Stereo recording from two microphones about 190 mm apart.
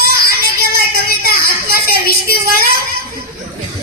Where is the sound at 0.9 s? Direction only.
50° right (ahead or behind).